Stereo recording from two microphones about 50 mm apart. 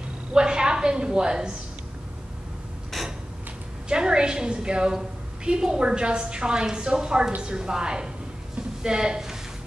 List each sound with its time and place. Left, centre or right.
0.3 s a woman's voice: centre
2.9 s mechanisms: centre
3.9 s a woman's voice: centre